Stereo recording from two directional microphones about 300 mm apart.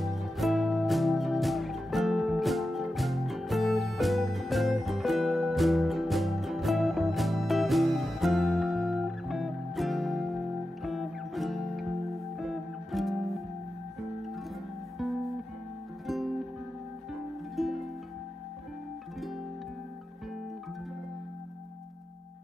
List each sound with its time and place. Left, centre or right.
0.0 s music: centre
15.0 s music: centre
17.6 s music: centre